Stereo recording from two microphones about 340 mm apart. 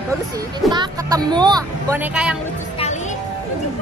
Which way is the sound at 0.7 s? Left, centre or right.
Centre.